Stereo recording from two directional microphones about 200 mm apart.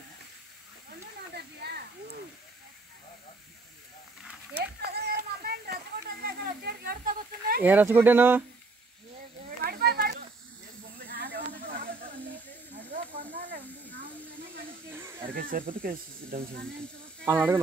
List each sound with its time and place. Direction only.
1.3 s a sound: 55° right (ahead or behind)
4.6 s horse: 50° right (ahead or behind)
6.2 s a sound: 50° right (ahead or behind)
7.6 s speech: 10° right (ahead or behind)
9.7 s a sound: 50° right (ahead or behind)
11.1 s snake: 50° right (ahead or behind)
14.9 s snake: 10° right (ahead or behind)
15.3 s speech: 45° right (ahead or behind)
17.2 s speech: 10° right (ahead or behind)